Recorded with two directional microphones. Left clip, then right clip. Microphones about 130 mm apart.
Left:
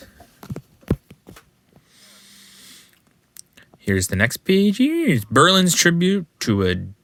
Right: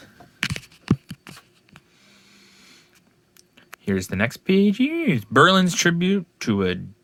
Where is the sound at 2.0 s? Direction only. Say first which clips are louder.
Left 5 dB; 15° left (ahead or behind).